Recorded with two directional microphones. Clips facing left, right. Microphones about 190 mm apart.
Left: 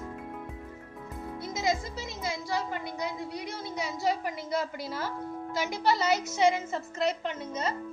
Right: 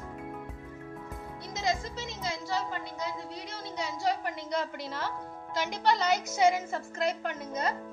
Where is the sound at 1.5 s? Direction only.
10° left (ahead or behind).